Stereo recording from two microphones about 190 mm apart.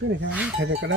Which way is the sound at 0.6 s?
70° right (ahead or behind).